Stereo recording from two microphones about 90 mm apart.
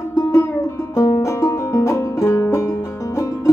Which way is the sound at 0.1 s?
35° left (ahead or behind).